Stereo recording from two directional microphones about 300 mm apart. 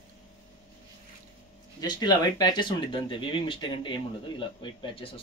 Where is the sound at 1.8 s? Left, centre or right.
Centre.